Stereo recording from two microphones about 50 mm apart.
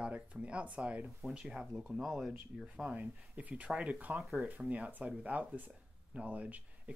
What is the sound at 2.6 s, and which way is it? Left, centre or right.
Speech, centre.